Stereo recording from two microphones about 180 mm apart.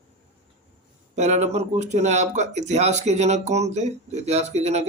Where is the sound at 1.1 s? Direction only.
40° right (ahead or behind).